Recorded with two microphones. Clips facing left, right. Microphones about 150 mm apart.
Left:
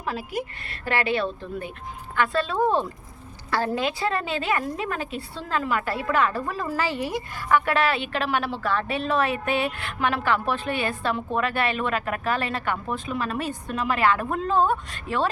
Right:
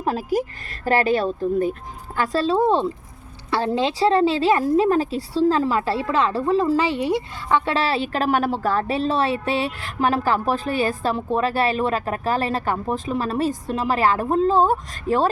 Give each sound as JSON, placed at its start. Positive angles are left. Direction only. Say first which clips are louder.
{"t": 0.0, "sound": "a woman's voice", "louder": "right 7 dB", "side_deg": -40}